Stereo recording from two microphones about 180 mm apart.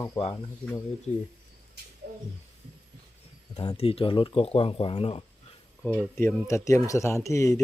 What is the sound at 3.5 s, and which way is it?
Speech, 30° left (ahead or behind).